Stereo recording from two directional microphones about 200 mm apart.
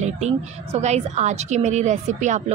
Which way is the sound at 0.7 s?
35° right (ahead or behind).